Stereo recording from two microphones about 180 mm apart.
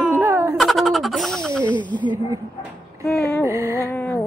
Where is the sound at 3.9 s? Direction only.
10° left (ahead or behind).